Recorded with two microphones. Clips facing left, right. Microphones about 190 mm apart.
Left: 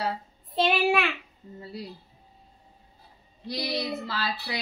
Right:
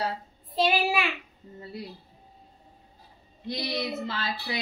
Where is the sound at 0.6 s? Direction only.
Centre (ahead or behind).